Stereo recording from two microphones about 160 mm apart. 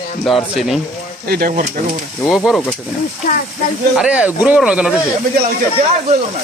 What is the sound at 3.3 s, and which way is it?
Speech, 50° left (ahead or behind).